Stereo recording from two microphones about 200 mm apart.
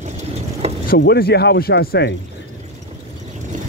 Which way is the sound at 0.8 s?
50° left (ahead or behind).